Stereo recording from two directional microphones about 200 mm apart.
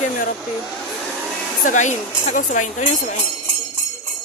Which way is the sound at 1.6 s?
40° left (ahead or behind).